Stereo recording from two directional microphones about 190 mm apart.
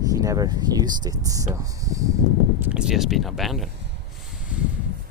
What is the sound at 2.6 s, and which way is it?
Speech, 5° right (ahead or behind).